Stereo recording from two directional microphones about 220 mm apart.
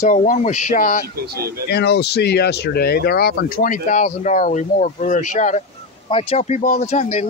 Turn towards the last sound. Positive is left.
turn(degrees=30)  # may be behind; listen again after turning